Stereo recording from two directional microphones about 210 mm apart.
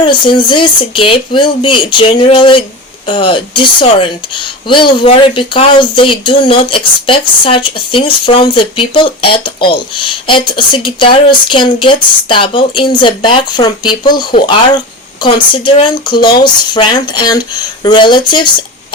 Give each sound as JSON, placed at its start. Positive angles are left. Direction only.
{"t": 0.0, "sound": "speech", "side_deg": 20}